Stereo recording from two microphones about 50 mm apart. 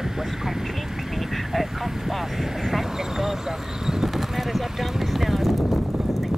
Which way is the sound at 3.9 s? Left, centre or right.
Centre.